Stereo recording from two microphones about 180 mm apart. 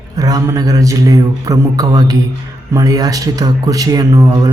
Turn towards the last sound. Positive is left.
turn(degrees=-20)  # may be behind; listen again after turning